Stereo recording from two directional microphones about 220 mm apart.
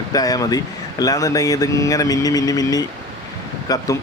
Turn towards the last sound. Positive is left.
turn(degrees=15)  # may be behind; listen again after turning